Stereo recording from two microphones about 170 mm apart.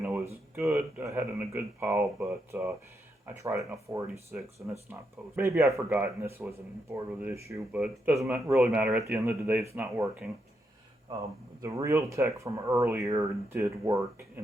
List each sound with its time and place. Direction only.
0.5 s speech: 15° right (ahead or behind)
8.5 s speech: centre (ahead or behind)
11.6 s speech: 20° right (ahead or behind)